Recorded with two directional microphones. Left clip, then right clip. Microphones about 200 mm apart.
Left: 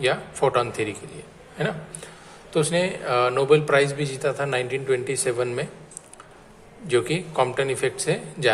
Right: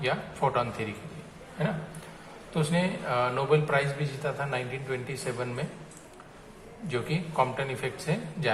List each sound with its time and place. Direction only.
0.0 s a man's voice: 50° left (ahead or behind)
6.8 s a man's voice: 50° left (ahead or behind)